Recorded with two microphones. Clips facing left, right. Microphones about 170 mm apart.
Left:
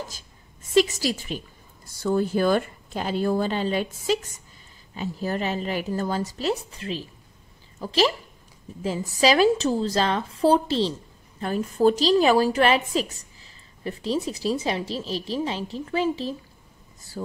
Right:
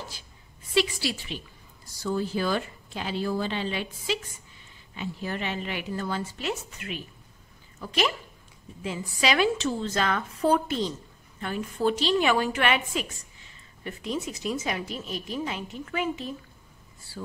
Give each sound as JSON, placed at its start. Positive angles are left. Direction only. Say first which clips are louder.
{"t": 0.1, "sound": "a woman's voice", "louder": "left 1 dB", "side_deg": 45}
{"t": 17.1, "sound": "a woman's voice", "louder": "left 5 dB", "side_deg": 45}